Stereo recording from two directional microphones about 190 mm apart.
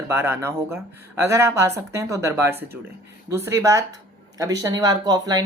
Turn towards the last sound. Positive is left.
turn(degrees=-20)  # may be behind; listen again after turning